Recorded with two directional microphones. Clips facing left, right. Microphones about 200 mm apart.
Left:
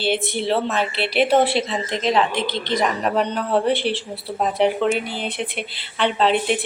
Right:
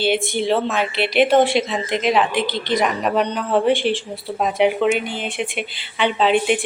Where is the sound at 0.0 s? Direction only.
Centre (ahead or behind).